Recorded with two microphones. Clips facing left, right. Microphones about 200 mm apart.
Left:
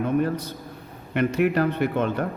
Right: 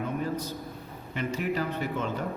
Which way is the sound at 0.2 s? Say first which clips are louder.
Left 6 dB; 65° left (ahead or behind).